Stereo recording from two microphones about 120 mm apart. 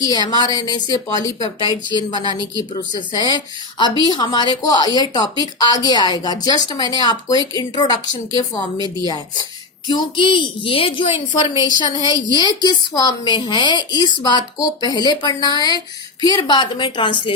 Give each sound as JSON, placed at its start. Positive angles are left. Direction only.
{"t": 0.0, "sound": "a woman's voice", "side_deg": 30}